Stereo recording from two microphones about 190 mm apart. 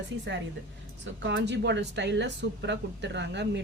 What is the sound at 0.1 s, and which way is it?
A woman's voice, 75° right (ahead or behind).